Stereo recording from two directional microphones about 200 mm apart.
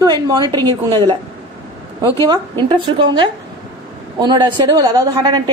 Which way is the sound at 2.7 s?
25° right (ahead or behind).